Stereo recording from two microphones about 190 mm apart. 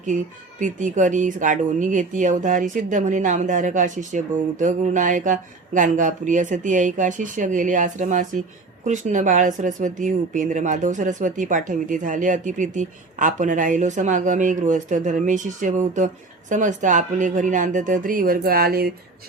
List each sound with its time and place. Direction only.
0.6 s a woman's voice: 40° right (ahead or behind)